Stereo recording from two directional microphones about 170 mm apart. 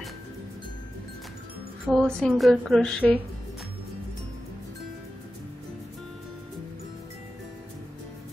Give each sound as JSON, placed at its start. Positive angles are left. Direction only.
{"t": 1.9, "sound": "speech", "side_deg": 0}